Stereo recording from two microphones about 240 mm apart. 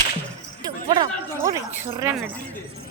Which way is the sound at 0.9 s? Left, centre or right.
Centre.